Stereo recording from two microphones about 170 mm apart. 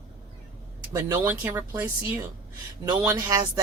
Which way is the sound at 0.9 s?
15° right (ahead or behind).